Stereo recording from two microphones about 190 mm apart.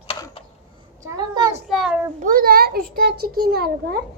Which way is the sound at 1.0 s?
20° right (ahead or behind).